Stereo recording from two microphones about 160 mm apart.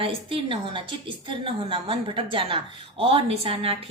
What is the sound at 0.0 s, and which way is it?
A woman's voice, 35° right (ahead or behind).